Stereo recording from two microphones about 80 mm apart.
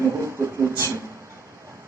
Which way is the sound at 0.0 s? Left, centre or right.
Right.